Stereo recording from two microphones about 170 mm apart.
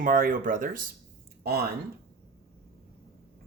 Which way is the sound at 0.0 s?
55° right (ahead or behind).